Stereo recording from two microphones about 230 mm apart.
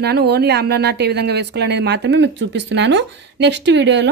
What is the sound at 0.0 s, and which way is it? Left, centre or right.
A woman's voice, right.